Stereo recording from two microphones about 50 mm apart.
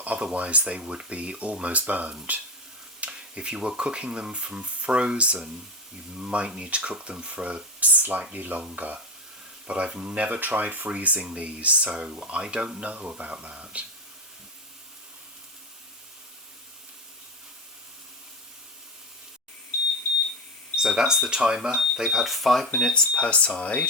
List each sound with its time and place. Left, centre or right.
0.3 s speech: right
3.0 s speech: right
20.7 s speech: centre
22.3 s speech: centre
23.0 s speech: left